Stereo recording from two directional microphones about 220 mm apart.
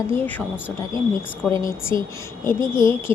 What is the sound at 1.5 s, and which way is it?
Speech, 15° left (ahead or behind).